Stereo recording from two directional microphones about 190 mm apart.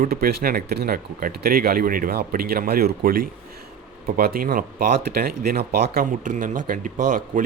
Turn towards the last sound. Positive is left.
turn(degrees=-45)  # may be behind; listen again after turning